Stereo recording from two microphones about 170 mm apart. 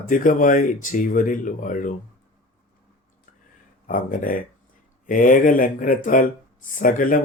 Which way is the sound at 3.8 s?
55° left (ahead or behind).